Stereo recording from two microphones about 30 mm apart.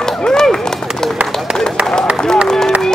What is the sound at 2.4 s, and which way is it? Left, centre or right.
Run, centre.